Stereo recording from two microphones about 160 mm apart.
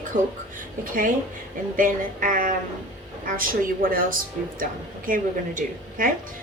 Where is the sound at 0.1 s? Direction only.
55° right (ahead or behind).